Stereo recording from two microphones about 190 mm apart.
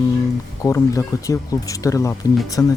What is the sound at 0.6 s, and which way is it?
Speech, 15° left (ahead or behind).